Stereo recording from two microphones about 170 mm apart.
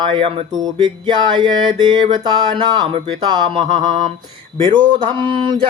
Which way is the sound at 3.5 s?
40° right (ahead or behind).